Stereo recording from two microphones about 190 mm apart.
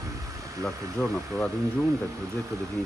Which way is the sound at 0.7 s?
Centre (ahead or behind).